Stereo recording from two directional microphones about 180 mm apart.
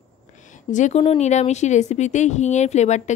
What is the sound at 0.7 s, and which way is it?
Speech, 40° left (ahead or behind).